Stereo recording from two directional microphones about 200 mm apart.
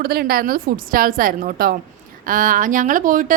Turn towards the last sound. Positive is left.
turn(degrees=-40)  # may be behind; listen again after turning